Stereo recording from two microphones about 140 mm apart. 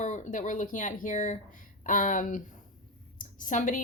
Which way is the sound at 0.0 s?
60° left (ahead or behind).